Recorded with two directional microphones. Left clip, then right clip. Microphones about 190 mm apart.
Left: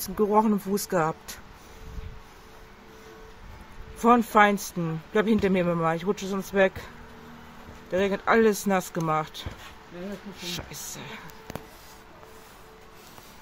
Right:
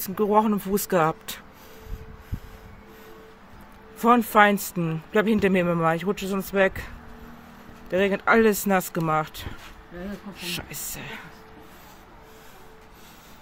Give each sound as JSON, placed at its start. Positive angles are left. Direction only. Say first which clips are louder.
{"t": 0.1, "sound": "a woman's voice", "louder": "right 1 dB", "side_deg": -30}
{"t": 4.0, "sound": "a woman's voice", "louder": "right 1 dB", "side_deg": -20}
{"t": 7.9, "sound": "speech", "louder": "right 3 dB", "side_deg": -15}